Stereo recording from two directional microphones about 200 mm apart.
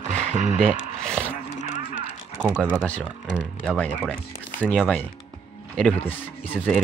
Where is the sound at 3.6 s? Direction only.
5° left (ahead or behind).